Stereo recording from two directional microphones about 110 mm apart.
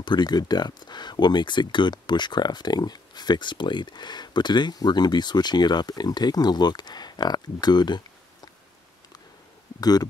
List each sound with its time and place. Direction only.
0.0 s speech: 40° left (ahead or behind)
9.8 s speech: 35° left (ahead or behind)